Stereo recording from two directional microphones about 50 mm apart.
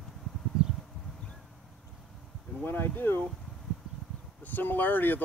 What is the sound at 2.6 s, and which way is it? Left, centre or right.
Speech, left.